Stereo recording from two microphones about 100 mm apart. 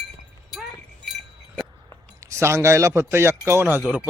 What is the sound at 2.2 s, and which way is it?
A man's voice, 30° right (ahead or behind).